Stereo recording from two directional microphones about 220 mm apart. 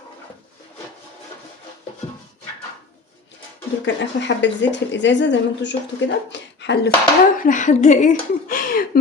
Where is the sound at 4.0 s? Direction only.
55° left (ahead or behind).